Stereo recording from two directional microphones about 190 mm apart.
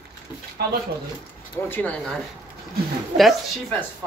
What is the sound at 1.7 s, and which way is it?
A woman's voice, 5° left (ahead or behind).